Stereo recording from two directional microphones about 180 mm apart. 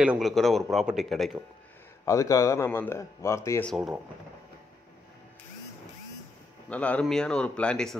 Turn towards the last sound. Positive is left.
turn(degrees=5)  # may be behind; listen again after turning